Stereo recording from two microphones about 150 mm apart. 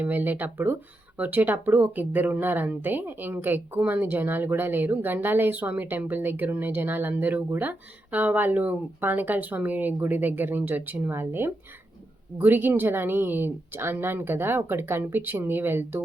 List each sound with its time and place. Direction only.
0.0 s speech: 10° right (ahead or behind)